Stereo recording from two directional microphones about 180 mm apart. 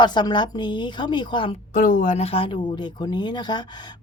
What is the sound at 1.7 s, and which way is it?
Speech, 45° left (ahead or behind).